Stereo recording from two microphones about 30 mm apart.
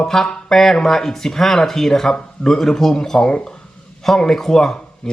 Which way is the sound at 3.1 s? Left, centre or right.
Left.